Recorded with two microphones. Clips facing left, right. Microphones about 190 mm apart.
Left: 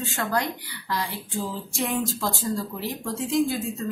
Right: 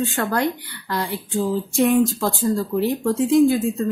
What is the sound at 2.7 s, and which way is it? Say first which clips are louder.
Speech: right 11 dB; 60° right (ahead or behind).